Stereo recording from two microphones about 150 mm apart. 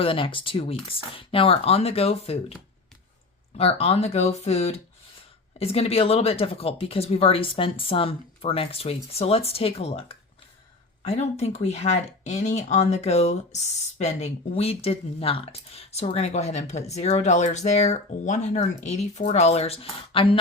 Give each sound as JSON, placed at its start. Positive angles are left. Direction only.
{"t": 0.0, "sound": "speech", "side_deg": 35}
{"t": 3.6, "sound": "speech", "side_deg": 40}